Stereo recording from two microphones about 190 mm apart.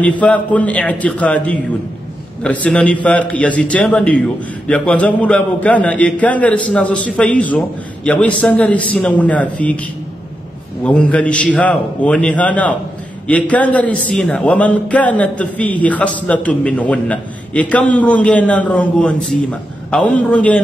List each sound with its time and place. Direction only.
0.0 s a man's voice: 5° left (ahead or behind)
10.8 s a man's voice: 5° left (ahead or behind)